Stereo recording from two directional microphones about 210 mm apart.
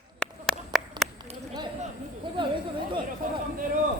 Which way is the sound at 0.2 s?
5° left (ahead or behind).